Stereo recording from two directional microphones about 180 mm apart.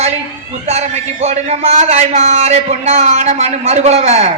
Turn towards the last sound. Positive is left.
turn(degrees=-40)  # may be behind; listen again after turning